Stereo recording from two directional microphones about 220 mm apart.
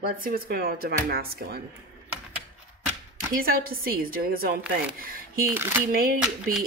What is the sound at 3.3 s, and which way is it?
Speech, 40° right (ahead or behind).